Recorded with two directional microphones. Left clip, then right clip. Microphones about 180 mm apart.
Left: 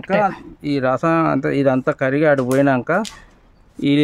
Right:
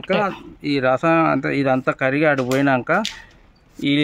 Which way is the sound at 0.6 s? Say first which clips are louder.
Right 1 dB; 45° left (ahead or behind).